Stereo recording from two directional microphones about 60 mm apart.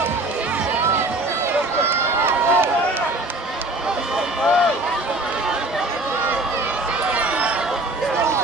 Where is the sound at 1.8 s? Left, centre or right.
Right.